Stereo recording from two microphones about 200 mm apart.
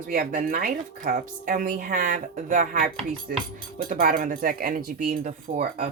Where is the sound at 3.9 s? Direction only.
45° right (ahead or behind).